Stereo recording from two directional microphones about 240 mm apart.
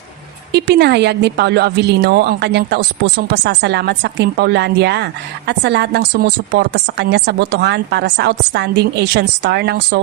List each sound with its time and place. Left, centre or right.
0.5 s a woman's voice: right